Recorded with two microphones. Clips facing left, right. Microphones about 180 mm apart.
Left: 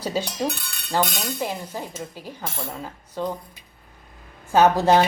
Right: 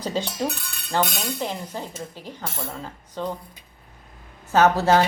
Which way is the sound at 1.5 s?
10° left (ahead or behind).